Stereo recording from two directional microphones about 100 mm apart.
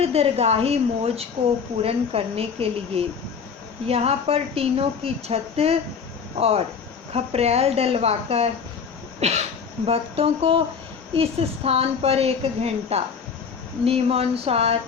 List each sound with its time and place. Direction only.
0.0 s a woman's voice: 90° right
1.8 s a woman's voice: 80° right
9.8 s a woman's voice: 75° right (ahead or behind)